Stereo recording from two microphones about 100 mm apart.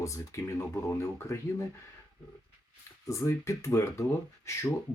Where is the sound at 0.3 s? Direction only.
30° left (ahead or behind).